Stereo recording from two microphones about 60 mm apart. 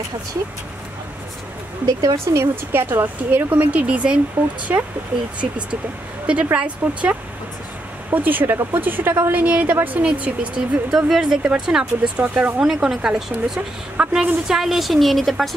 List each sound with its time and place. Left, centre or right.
1.9 s speech: right
2.2 s speech: right
2.7 s speech: right
3.3 s speech: right
4.7 s speech: right
6.2 s speech: right
10.9 s speech: centre
12.6 s a woman's voice: centre